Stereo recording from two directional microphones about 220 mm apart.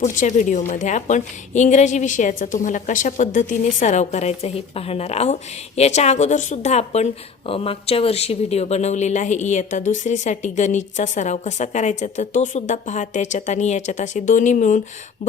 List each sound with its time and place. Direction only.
0.0 s a woman's voice: 35° left (ahead or behind)